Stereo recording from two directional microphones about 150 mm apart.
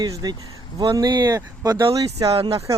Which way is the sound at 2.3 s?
40° right (ahead or behind).